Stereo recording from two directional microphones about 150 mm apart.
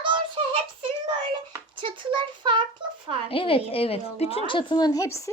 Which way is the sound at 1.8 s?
35° right (ahead or behind).